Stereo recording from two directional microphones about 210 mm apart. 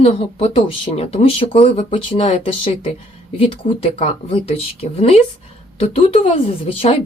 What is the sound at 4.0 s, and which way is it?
Speech, 25° left (ahead or behind).